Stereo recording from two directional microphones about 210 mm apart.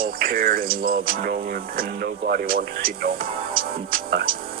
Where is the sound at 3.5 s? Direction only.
45° right (ahead or behind).